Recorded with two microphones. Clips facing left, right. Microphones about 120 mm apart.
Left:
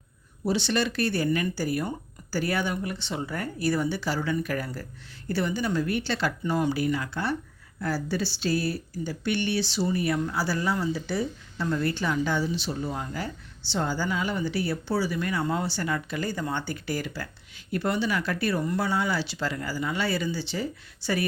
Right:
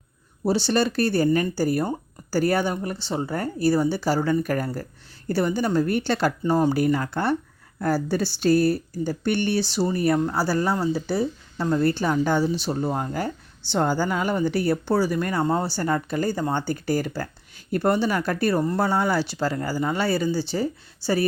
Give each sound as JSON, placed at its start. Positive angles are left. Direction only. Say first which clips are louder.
{"t": 0.4, "sound": "a woman's voice", "louder": "right 4 dB", "side_deg": -40}
{"t": 6.4, "sound": "a woman's voice", "louder": "right 5 dB", "side_deg": -35}